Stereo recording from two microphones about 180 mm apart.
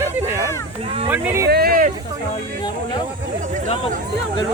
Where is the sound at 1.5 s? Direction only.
55° right (ahead or behind).